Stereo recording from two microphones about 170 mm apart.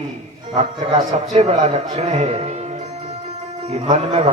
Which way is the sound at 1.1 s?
45° right (ahead or behind).